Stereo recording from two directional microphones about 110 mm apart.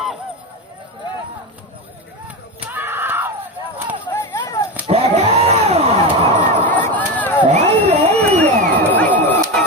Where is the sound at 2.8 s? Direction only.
20° right (ahead or behind).